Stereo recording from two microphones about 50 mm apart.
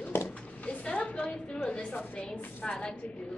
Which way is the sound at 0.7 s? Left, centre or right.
Left.